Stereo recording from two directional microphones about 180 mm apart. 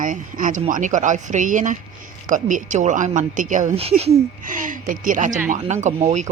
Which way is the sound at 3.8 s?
35° right (ahead or behind).